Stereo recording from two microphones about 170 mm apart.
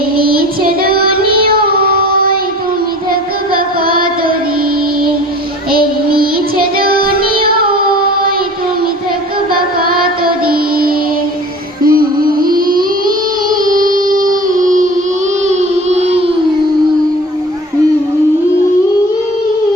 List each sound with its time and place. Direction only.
0.8 s child singing: 60° right (ahead or behind)
3.5 s music: 60° right (ahead or behind)
5.7 s child singing: 60° right (ahead or behind)
6.7 s music: 60° right (ahead or behind)
10.4 s music: 60° right (ahead or behind)
15.4 s a sound: 40° right (ahead or behind)